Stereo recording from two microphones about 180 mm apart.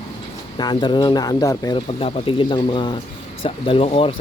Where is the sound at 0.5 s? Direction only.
25° left (ahead or behind).